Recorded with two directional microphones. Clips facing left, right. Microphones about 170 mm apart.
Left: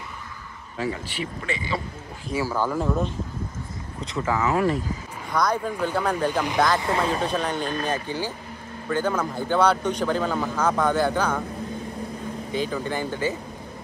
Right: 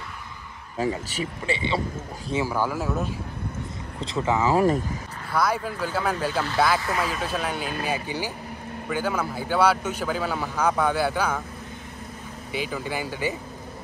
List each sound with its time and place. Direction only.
0.7 s a man's voice: 40° right (ahead or behind)
1.4 s speech: 30° right (ahead or behind)
2.3 s a man's voice: 15° right (ahead or behind)
4.0 s speech: 30° right (ahead or behind)
5.3 s a man's voice: 5° right (ahead or behind)
12.5 s a man's voice: 10° right (ahead or behind)